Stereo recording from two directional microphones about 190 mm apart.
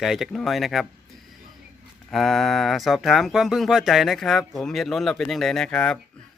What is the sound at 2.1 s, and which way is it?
Speech, centre (ahead or behind).